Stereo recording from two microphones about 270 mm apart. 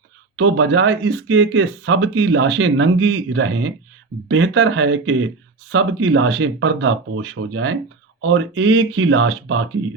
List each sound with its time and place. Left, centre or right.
0.3 s speech: right